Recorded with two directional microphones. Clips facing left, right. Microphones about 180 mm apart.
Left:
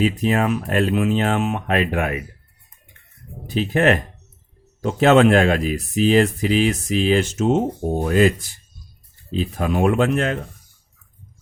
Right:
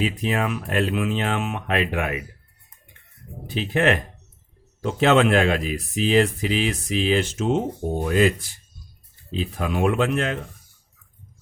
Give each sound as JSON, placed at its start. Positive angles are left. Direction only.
{"t": 0.0, "sound": "speech", "side_deg": 45}
{"t": 3.4, "sound": "speech", "side_deg": 40}
{"t": 9.3, "sound": "speech", "side_deg": 45}